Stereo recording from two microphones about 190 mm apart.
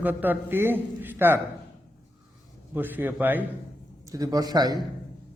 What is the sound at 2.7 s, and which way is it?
A man's voice, 10° right (ahead or behind).